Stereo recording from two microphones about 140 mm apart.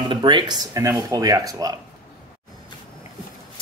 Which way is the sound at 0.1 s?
35° right (ahead or behind).